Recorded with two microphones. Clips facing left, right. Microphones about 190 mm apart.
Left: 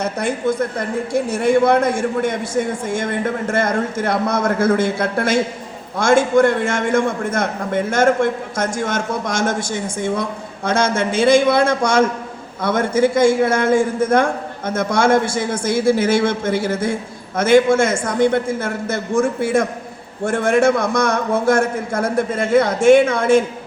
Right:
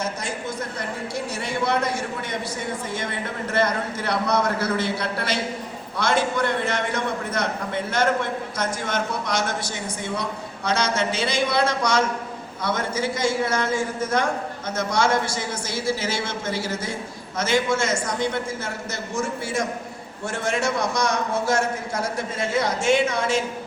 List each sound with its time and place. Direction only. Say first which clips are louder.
0.0 s a man's voice: left 9 dB; 60° left (ahead or behind)